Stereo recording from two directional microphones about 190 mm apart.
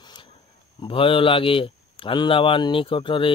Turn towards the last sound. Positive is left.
turn(degrees=25)  # may be behind; listen again after turning